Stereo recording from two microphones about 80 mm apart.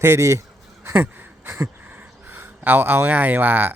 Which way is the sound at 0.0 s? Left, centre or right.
Right.